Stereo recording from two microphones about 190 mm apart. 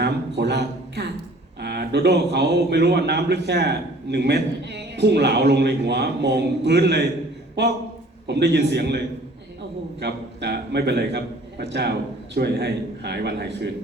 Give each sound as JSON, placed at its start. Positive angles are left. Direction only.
{"t": 0.0, "sound": "a sound", "side_deg": -65}
{"t": 1.6, "sound": "a man's voice", "side_deg": -60}
{"t": 8.3, "sound": "a man's voice", "side_deg": -60}
{"t": 10.0, "sound": "a man's voice", "side_deg": -60}